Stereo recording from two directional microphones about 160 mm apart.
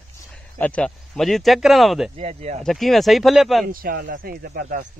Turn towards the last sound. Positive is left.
turn(degrees=-60)  # may be behind; listen again after turning